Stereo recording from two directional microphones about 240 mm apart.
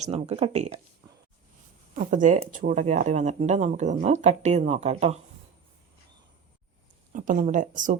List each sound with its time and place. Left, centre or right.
0.0 s speech: right
2.0 s speech: right
7.1 s speech: right